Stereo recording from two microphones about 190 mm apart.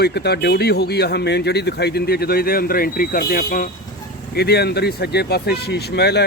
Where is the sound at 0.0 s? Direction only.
60° left (ahead or behind).